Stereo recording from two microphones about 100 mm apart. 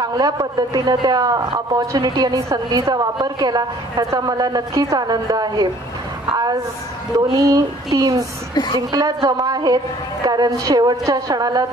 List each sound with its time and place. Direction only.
0.0 s a man's voice: 40° right (ahead or behind)